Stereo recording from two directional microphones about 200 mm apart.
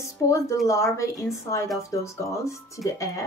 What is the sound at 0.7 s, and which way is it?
Speech, 15° left (ahead or behind).